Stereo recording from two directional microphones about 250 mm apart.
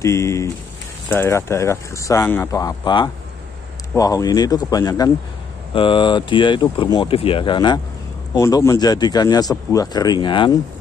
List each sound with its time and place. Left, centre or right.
0.0 s speech: centre